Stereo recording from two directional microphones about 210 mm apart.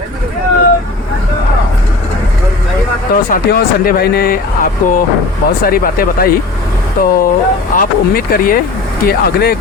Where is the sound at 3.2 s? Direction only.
45° left (ahead or behind).